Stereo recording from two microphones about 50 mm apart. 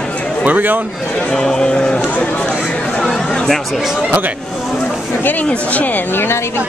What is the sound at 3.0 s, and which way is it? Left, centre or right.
Speech, centre.